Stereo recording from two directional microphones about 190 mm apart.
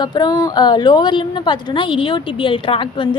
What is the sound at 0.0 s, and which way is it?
A woman's voice, 20° left (ahead or behind).